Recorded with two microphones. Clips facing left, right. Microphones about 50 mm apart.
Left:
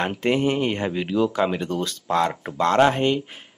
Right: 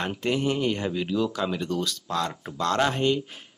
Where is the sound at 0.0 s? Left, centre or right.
Left.